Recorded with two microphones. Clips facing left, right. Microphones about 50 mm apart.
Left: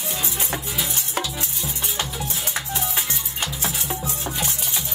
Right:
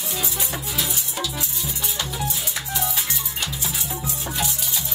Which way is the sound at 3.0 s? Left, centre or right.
Left.